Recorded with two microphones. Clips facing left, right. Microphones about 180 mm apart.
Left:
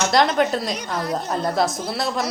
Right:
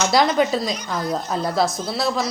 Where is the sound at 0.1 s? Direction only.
5° right (ahead or behind).